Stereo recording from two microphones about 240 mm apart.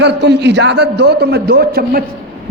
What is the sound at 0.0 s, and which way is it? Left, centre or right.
A man's voice, right.